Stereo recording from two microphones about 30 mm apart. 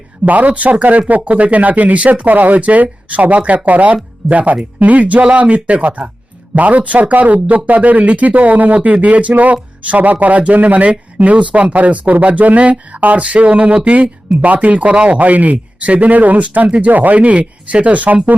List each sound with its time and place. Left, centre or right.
0.3 s speech: right
15.2 s speech: right
17.2 s speech: right